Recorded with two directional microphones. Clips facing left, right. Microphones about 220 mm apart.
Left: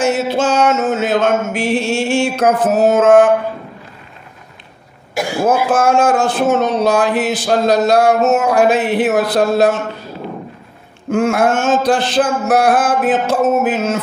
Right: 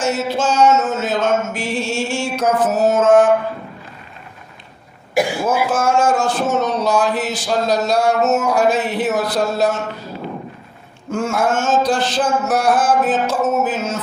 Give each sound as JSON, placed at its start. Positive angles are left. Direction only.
{"t": 0.0, "sound": "speech", "side_deg": 55}
{"t": 5.4, "sound": "speech", "side_deg": 55}
{"t": 11.1, "sound": "speech", "side_deg": 55}